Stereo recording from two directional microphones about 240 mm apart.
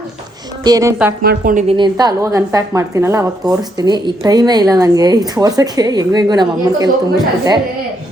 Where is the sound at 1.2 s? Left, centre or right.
Right; by 6.9 s centre.